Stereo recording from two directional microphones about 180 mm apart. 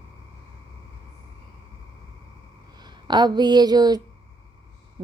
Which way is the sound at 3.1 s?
25° right (ahead or behind).